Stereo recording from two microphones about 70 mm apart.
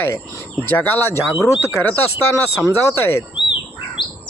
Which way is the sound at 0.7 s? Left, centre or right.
Left.